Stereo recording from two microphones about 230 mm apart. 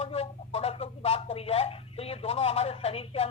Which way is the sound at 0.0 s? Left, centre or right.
Left.